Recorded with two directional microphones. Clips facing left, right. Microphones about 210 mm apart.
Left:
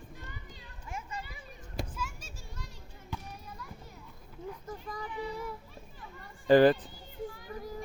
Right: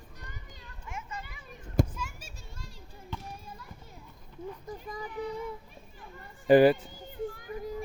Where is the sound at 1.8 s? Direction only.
50° right (ahead or behind).